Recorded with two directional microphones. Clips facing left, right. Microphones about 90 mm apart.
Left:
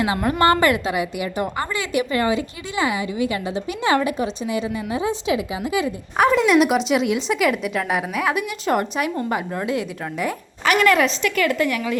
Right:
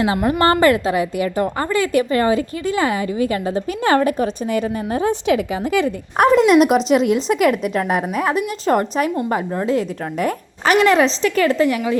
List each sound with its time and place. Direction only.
0.3 s a woman's voice: 30° right (ahead or behind); by 6.4 s 55° right (ahead or behind)
6.4 s speech: 40° right (ahead or behind)
10.8 s speech: 30° right (ahead or behind)